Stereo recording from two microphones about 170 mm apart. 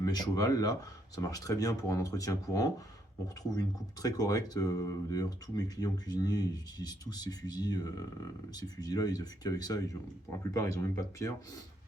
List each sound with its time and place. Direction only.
0.0 s speech: 20° left (ahead or behind)
4.0 s speech: 20° left (ahead or behind)